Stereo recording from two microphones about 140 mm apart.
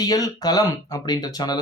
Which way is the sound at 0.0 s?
25° left (ahead or behind).